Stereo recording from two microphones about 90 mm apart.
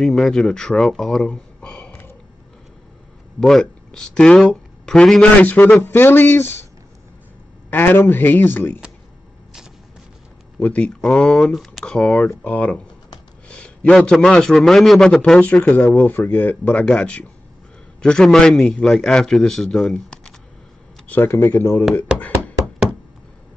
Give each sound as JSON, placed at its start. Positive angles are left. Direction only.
{"t": 0.0, "sound": "speech", "side_deg": 0}
{"t": 3.3, "sound": "speech", "side_deg": 5}
{"t": 5.4, "sound": "speech", "side_deg": 20}
{"t": 7.7, "sound": "speech", "side_deg": 25}
{"t": 10.6, "sound": "a man's voice", "side_deg": 15}
{"t": 21.1, "sound": "speech", "side_deg": 25}